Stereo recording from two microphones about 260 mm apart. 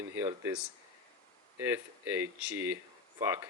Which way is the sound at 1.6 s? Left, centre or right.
Centre.